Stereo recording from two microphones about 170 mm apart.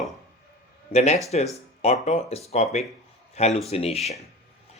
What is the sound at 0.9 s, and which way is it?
Speech, 40° left (ahead or behind).